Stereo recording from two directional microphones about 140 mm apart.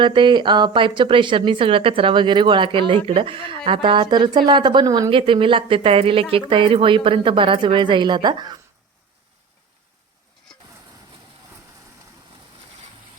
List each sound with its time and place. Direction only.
0.0 s speech: 35° right (ahead or behind)